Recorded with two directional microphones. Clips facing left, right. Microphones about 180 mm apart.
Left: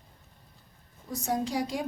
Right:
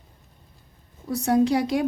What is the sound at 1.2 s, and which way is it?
Speech, 70° right (ahead or behind).